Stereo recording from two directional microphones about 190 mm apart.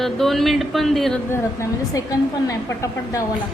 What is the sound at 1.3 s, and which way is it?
A woman's voice, 15° left (ahead or behind).